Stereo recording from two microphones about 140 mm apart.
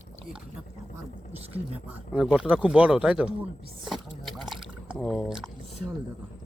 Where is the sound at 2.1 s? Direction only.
5° right (ahead or behind).